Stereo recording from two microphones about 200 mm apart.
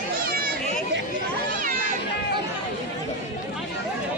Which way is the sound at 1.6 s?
40° right (ahead or behind).